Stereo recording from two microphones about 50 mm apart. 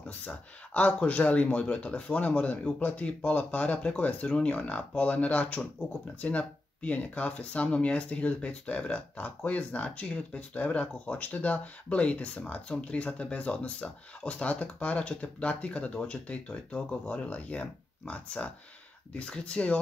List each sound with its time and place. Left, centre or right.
0.2 s speech: left